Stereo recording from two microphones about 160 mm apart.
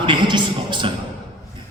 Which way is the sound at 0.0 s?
30° right (ahead or behind).